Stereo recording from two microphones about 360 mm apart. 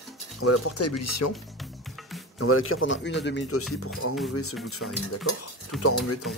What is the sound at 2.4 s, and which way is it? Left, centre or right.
Speech, left.